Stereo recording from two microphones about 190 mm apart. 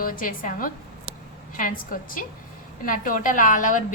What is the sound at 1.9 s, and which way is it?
A woman's voice, 50° left (ahead or behind).